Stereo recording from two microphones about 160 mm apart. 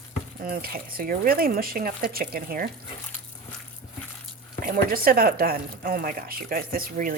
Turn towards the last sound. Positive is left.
turn(degrees=-60)  # may be behind; listen again after turning